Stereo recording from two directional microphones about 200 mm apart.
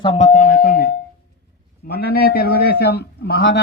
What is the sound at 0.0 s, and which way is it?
Doorbell, 35° left (ahead or behind).